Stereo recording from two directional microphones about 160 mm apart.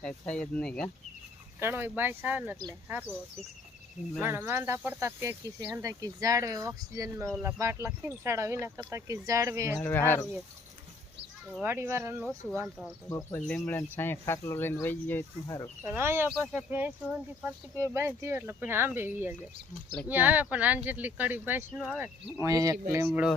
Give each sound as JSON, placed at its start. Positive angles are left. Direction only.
{"t": 0.0, "sound": "speech", "side_deg": 5}
{"t": 1.5, "sound": "speech", "side_deg": -15}
{"t": 4.2, "sound": "speech", "side_deg": -15}
{"t": 9.8, "sound": "speech", "side_deg": 15}
{"t": 11.6, "sound": "speech", "side_deg": -15}
{"t": 13.1, "sound": "speech", "side_deg": 20}
{"t": 15.8, "sound": "speech", "side_deg": -15}
{"t": 22.4, "sound": "speech", "side_deg": -20}